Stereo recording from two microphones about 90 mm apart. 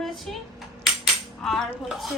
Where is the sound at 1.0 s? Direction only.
Centre (ahead or behind).